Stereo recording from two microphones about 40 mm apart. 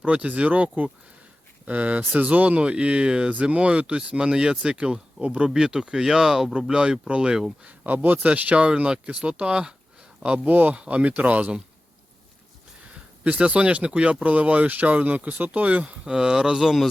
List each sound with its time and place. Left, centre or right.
0.0 s speech: right
5.5 s speech: centre
7.6 s speech: right
8.6 s speech: right
10.4 s speech: right
10.8 s speech: right
12.9 s speech: right
15.9 s speech: right